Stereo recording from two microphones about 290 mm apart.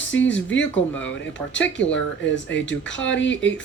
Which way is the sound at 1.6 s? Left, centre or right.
Centre.